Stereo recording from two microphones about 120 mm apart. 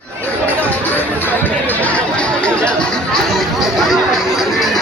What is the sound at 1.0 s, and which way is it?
Speech, 15° left (ahead or behind).